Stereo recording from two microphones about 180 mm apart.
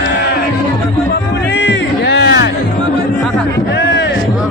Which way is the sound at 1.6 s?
75° left (ahead or behind).